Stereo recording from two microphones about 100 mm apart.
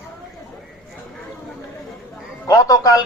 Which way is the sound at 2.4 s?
35° left (ahead or behind).